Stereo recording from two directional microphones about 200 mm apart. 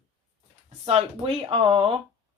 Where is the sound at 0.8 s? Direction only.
30° right (ahead or behind).